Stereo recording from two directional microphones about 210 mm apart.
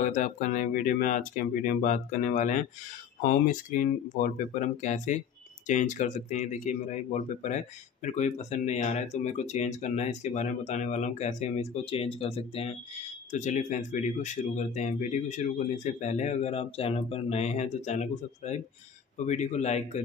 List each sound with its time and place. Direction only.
0.0 s speech: 35° left (ahead or behind)